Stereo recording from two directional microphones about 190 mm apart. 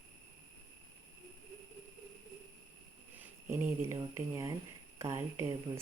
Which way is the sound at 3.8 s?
15° right (ahead or behind).